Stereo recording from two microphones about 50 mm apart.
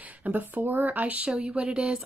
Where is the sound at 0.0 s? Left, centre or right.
Right.